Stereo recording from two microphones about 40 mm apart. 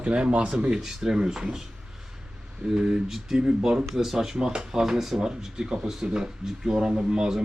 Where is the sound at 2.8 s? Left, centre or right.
Centre.